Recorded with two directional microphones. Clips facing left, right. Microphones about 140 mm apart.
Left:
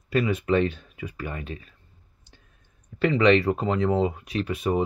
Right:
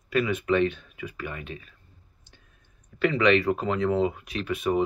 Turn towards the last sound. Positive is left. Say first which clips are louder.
# left 1 dB
turn(degrees=30)  # may be behind; listen again after turning